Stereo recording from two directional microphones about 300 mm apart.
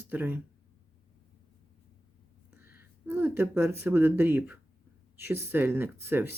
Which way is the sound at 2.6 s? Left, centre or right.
Centre.